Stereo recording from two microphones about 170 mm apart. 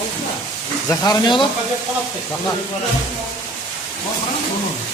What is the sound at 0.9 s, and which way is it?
Speech, 25° left (ahead or behind).